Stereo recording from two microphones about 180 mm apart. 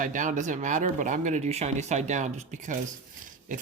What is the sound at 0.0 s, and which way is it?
Speech, 45° right (ahead or behind).